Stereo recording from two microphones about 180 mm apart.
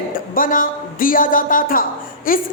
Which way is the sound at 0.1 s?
50° left (ahead or behind).